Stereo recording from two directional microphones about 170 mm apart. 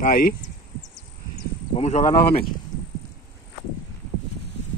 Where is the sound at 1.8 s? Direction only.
40° left (ahead or behind).